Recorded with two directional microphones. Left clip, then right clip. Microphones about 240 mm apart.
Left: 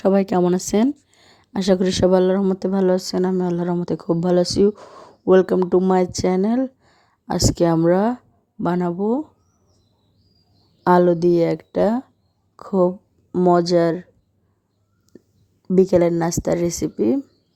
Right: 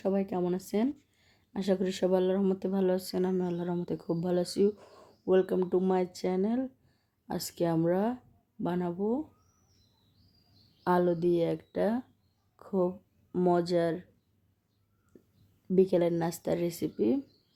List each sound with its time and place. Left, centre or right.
0.0 s speech: left
10.8 s a woman's voice: left
15.1 s whispering: left
15.6 s a woman's voice: left